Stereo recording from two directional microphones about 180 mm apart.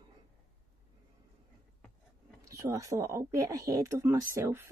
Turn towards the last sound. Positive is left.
turn(degrees=-15)  # may be behind; listen again after turning